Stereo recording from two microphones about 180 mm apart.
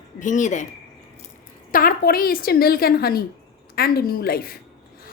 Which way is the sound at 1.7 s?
50° left (ahead or behind).